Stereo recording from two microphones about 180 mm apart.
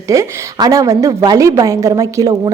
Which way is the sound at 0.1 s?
20° right (ahead or behind).